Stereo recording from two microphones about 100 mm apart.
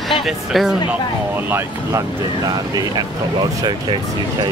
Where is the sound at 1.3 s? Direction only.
25° right (ahead or behind); by 3.1 s 40° right (ahead or behind).